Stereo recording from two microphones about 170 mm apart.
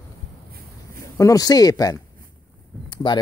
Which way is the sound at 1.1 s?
20° left (ahead or behind).